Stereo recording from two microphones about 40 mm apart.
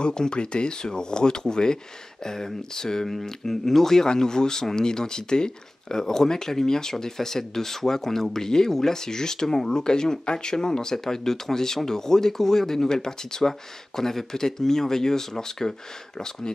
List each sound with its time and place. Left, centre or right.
0.0 s speech: left